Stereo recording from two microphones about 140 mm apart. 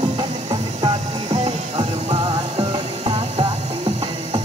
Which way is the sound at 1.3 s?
50° right (ahead or behind).